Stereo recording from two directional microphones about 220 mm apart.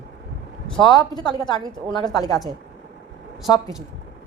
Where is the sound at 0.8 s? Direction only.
20° left (ahead or behind).